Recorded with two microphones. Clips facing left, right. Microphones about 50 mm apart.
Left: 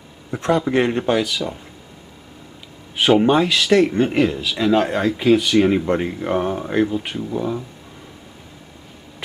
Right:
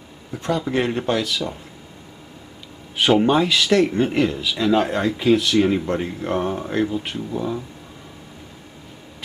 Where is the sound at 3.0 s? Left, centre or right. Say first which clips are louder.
Left 2 dB; centre.